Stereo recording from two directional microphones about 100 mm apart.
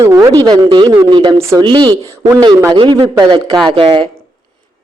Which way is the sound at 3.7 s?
55° right (ahead or behind).